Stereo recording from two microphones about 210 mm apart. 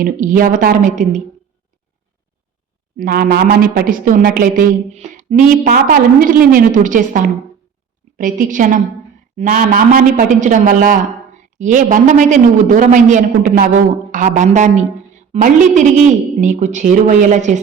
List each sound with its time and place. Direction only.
0.0 s a woman's voice: 40° right (ahead or behind)
3.0 s a woman's voice: 45° right (ahead or behind)